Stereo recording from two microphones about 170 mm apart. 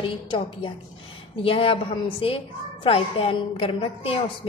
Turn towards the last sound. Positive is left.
turn(degrees=35)  # may be behind; listen again after turning